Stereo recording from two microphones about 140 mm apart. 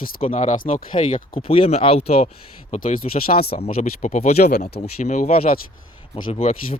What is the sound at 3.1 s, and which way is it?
Speech, 90° left.